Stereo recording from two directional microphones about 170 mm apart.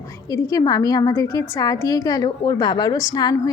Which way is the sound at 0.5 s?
20° left (ahead or behind).